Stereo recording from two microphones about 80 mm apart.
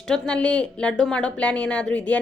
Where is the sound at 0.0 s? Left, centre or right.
Centre.